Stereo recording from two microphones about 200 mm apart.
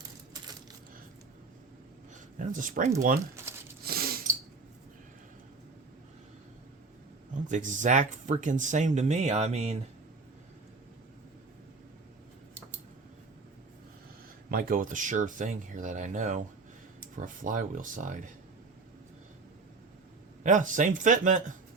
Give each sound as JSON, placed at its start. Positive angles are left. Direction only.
{"t": 2.4, "sound": "speech", "side_deg": -40}
{"t": 3.4, "sound": "crumpling", "side_deg": -15}
{"t": 3.8, "sound": "a sound", "side_deg": -50}
{"t": 7.4, "sound": "speech", "side_deg": -40}
{"t": 14.5, "sound": "speech", "side_deg": -45}
{"t": 20.4, "sound": "speech", "side_deg": -40}